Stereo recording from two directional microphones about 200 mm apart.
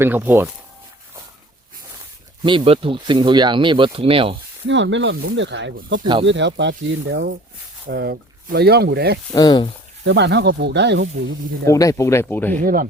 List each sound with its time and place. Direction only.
0.0 s speech: 10° right (ahead or behind)
2.4 s speech: 25° right (ahead or behind)
4.6 s speech: 65° right (ahead or behind)
9.3 s speech: 20° left (ahead or behind)
10.1 s speech: 60° right (ahead or behind)
11.6 s speech: 15° left (ahead or behind)
12.6 s speech: 45° right (ahead or behind)